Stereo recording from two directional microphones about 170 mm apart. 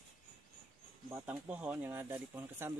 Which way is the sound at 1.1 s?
10° right (ahead or behind).